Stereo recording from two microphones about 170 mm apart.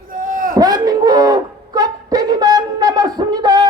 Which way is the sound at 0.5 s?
25° right (ahead or behind).